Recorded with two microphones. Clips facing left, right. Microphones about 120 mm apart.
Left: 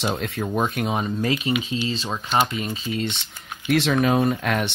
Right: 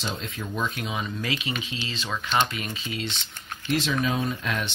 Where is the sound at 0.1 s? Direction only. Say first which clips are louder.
Left 8 dB; 50° left (ahead or behind).